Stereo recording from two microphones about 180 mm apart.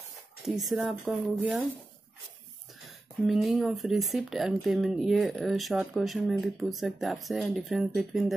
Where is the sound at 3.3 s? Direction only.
Centre (ahead or behind).